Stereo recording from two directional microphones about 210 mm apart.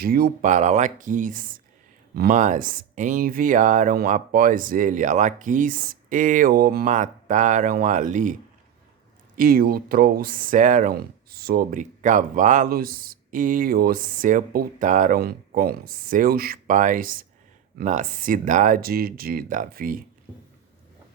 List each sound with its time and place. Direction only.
0.0 s speech: 45° right (ahead or behind)